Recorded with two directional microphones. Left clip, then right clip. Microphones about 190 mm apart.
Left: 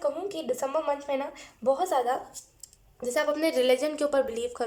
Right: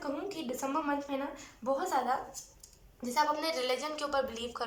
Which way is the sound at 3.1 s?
45° left (ahead or behind).